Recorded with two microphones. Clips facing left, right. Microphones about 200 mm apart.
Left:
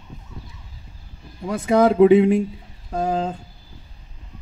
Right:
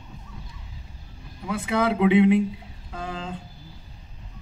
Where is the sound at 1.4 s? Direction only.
45° left (ahead or behind).